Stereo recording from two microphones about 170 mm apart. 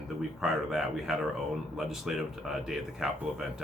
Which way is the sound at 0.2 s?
Centre (ahead or behind).